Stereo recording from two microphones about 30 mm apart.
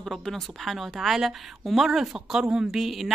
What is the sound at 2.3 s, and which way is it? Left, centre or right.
Speech, right.